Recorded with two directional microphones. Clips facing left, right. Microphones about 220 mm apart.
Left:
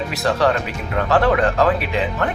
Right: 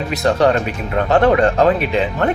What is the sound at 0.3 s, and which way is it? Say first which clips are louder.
Speech: right 4 dB; 20° right (ahead or behind).